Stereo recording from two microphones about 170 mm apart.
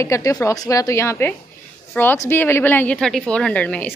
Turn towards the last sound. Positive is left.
turn(degrees=10)  # may be behind; listen again after turning